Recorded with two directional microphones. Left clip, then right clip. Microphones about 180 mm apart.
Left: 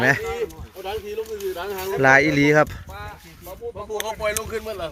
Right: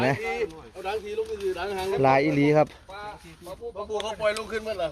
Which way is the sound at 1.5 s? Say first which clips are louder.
Left 1 dB; 25° right (ahead or behind).